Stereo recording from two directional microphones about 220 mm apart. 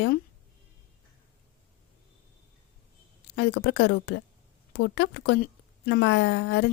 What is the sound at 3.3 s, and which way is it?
A woman's voice, 50° left (ahead or behind).